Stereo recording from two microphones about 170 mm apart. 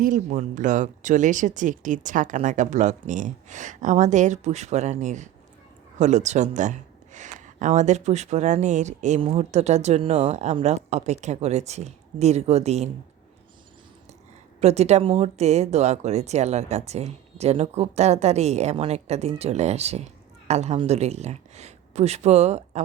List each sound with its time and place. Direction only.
0.0 s speech: 50° right (ahead or behind)
14.6 s speech: 40° right (ahead or behind)